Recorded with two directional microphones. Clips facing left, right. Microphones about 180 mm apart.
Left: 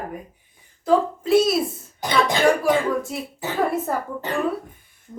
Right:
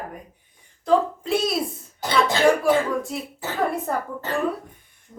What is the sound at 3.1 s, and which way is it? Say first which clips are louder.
Speech: left 2 dB; centre (ahead or behind).